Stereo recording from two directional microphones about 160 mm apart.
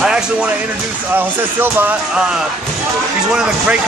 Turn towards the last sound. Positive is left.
turn(degrees=-5)  # may be behind; listen again after turning